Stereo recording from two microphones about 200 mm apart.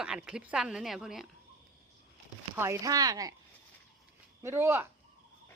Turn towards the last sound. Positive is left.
turn(degrees=-10)  # may be behind; listen again after turning